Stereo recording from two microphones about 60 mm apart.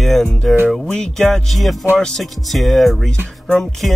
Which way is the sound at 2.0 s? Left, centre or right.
Centre.